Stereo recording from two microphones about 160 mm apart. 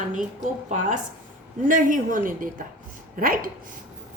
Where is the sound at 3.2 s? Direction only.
60° right (ahead or behind).